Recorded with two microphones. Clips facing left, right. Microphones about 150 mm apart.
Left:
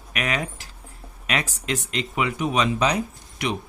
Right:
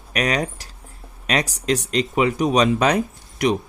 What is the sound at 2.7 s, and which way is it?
Speech, 55° right (ahead or behind).